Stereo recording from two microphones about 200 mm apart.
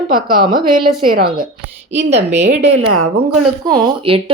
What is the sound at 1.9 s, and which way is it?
Speech, 35° right (ahead or behind).